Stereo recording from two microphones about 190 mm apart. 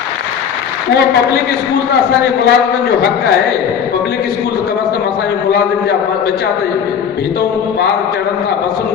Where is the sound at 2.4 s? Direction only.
55° left (ahead or behind).